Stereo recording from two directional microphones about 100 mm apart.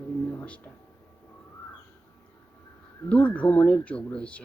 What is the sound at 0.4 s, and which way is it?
Speech, 15° left (ahead or behind).